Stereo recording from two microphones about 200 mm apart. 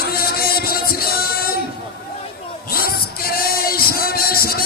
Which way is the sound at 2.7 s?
50° left (ahead or behind).